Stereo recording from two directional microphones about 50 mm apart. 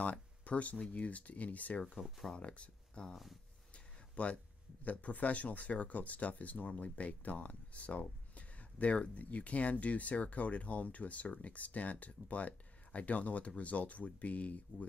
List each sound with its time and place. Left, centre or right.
0.0 s speech: left
2.0 s speech: centre
2.3 s speech: left
3.7 s a sound: left
4.8 s speech: left